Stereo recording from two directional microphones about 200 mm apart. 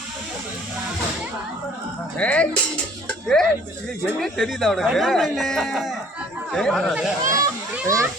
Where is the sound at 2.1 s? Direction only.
5° left (ahead or behind).